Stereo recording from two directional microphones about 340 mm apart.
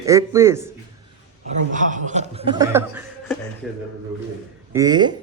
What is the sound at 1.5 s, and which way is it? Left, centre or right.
Speech, right.